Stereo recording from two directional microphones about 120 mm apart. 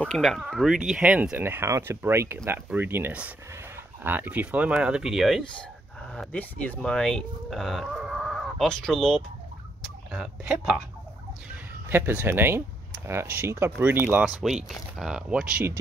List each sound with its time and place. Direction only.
0.0 s speech: 5° left (ahead or behind)
6.1 s speech: 10° left (ahead or behind)
10.1 s speech: 5° right (ahead or behind)
11.9 s speech: 20° right (ahead or behind)